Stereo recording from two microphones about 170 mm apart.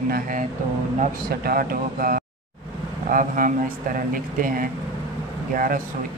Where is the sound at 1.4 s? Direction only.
60° right (ahead or behind).